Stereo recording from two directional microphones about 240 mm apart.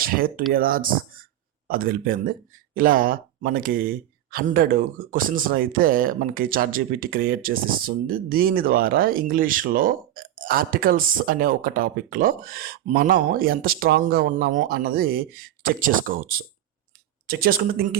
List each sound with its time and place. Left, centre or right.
0.0 s speech: right